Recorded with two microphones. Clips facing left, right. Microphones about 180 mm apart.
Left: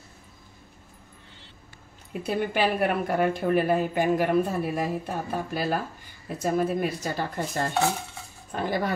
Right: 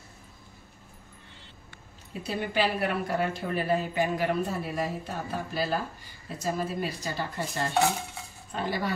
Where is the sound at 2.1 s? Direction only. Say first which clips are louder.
Left 5 dB; 55° left (ahead or behind).